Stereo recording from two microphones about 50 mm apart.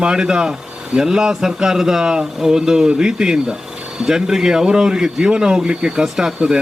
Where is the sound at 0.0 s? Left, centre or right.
Centre.